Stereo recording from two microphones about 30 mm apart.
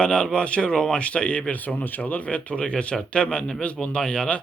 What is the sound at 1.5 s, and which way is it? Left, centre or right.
Speech, left.